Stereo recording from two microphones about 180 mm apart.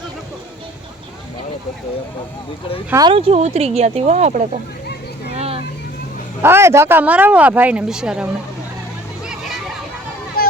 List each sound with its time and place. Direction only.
2.9 s speech: 25° right (ahead or behind); by 4.4 s 40° right (ahead or behind)
5.4 s vehicle: 35° right (ahead or behind)
6.4 s speech: 15° right (ahead or behind)
9.3 s hubbub: centre (ahead or behind)
10.4 s a sound: 55° left (ahead or behind)